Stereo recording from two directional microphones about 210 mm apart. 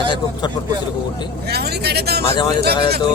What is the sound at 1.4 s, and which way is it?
Speech, 50° right (ahead or behind).